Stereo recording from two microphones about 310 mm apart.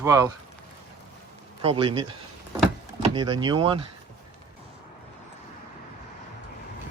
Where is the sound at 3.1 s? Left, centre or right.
Centre.